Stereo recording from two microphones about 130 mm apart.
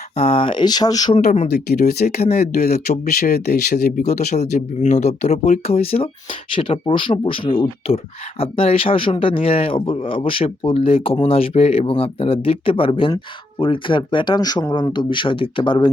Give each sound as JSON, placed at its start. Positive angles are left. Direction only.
{"t": 0.2, "sound": "speech", "side_deg": 45}
{"t": 1.2, "sound": "speech", "side_deg": 65}
{"t": 3.9, "sound": "speech", "side_deg": 65}